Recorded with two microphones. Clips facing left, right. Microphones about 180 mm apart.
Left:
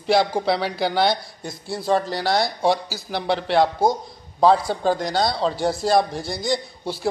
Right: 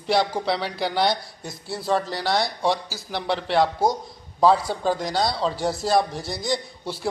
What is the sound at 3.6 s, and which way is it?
Speech, 25° left (ahead or behind).